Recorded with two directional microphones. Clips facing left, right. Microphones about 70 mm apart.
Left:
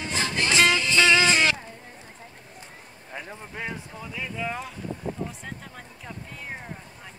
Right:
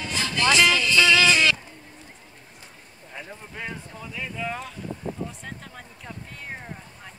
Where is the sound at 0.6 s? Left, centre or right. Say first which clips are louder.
Left 2 dB; left.